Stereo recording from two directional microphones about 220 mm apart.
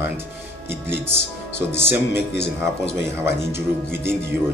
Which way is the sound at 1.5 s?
10° right (ahead or behind).